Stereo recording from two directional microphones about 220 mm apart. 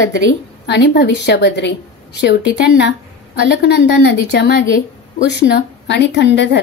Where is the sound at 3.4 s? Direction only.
50° left (ahead or behind).